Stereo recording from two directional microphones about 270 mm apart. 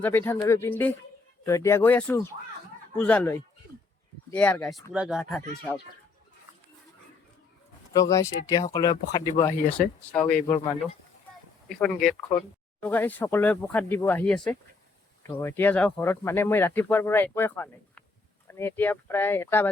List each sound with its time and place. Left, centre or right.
0.0 s speech: centre
7.9 s speech: centre
10.4 s speech: centre
11.8 s speech: centre